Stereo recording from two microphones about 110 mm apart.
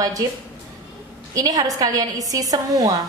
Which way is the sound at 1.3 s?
35° right (ahead or behind).